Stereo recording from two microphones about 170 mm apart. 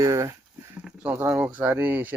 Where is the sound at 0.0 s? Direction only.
20° right (ahead or behind).